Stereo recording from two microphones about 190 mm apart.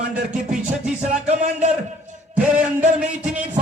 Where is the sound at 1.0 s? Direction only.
35° right (ahead or behind).